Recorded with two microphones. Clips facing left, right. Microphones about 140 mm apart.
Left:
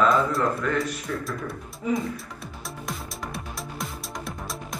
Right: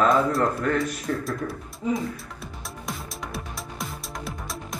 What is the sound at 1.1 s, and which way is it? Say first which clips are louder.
Speech: right 3 dB; 40° right (ahead or behind).